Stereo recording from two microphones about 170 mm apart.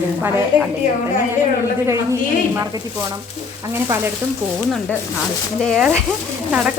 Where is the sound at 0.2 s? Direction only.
15° right (ahead or behind).